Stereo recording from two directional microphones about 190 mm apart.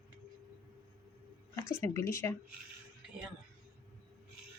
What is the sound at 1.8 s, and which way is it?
Speech, 15° left (ahead or behind).